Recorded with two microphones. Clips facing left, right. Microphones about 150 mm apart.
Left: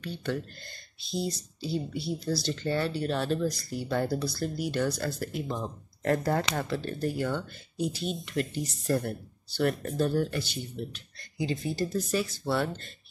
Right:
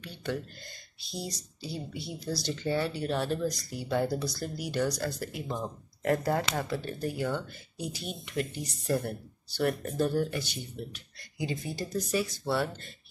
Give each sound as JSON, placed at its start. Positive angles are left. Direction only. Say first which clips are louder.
{"t": 0.0, "sound": "speech", "louder": "left 2 dB", "side_deg": -10}